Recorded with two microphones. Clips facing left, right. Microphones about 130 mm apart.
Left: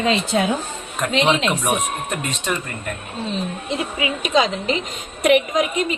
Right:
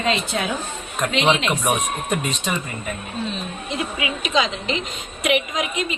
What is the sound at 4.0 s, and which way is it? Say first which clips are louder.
A woman's voice: left 4 dB; 40° left (ahead or behind).